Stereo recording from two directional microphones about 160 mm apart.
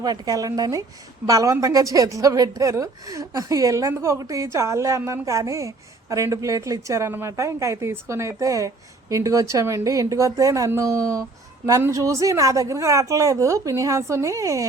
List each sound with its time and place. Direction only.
0.0 s a woman's voice: 25° right (ahead or behind)